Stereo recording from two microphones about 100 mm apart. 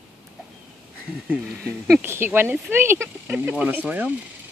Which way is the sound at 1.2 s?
5° right (ahead or behind).